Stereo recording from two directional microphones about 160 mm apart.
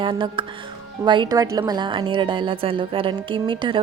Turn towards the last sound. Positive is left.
turn(degrees=-30)  # may be behind; listen again after turning